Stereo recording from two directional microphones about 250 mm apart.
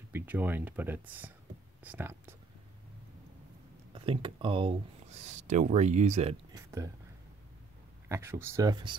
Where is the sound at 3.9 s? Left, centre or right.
Right.